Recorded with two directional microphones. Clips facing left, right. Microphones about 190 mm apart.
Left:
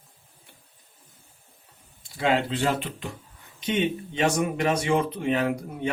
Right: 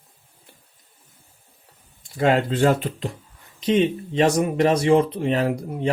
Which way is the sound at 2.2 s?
45° right (ahead or behind).